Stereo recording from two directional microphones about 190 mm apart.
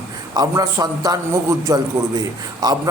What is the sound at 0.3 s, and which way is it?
A man's voice, 20° right (ahead or behind).